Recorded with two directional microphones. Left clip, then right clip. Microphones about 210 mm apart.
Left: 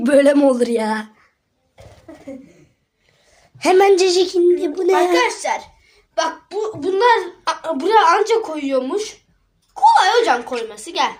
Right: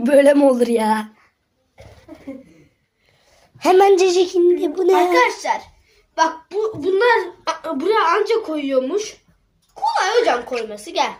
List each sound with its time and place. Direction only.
0.0 s a woman's voice: 10° left (ahead or behind)
2.1 s a sound: 15° left (ahead or behind)
3.6 s a woman's voice: 5° left (ahead or behind)
5.0 s a woman's voice: 15° left (ahead or behind)